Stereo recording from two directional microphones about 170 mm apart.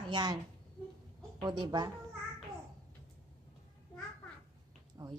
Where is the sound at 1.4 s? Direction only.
25° right (ahead or behind).